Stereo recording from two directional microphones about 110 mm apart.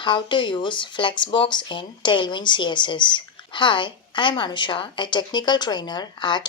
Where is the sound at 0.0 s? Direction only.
45° left (ahead or behind).